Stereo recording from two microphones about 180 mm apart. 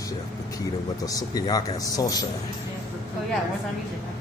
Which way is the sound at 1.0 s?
20° left (ahead or behind).